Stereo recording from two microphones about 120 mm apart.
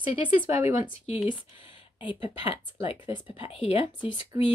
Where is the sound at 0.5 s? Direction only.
25° right (ahead or behind).